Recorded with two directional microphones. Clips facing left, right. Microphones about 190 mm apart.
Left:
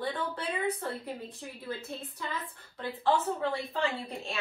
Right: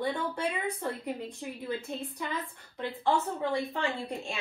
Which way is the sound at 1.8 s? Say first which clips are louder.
Right 3 dB; 15° right (ahead or behind).